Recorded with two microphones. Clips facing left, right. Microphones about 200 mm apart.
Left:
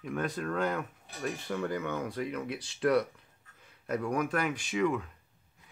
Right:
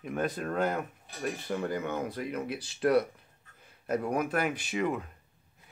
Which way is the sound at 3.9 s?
45° right (ahead or behind).